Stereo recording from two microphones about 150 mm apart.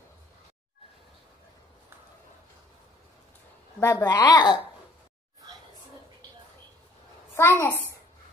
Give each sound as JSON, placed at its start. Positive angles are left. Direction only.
{"t": 3.8, "sound": "a woman's voice", "side_deg": 20}
{"t": 7.3, "sound": "a child's voice", "side_deg": 15}